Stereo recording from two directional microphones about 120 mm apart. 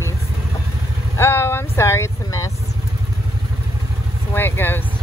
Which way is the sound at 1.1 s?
20° left (ahead or behind).